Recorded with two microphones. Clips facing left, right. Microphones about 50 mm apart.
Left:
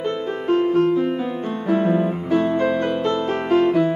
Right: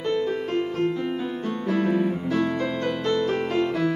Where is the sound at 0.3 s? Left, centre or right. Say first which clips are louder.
Left 7 dB; left.